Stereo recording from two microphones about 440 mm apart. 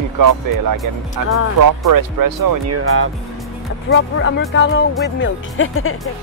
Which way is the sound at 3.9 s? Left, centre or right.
Left.